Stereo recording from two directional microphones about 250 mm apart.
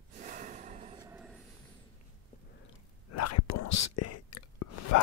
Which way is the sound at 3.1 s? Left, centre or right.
Left.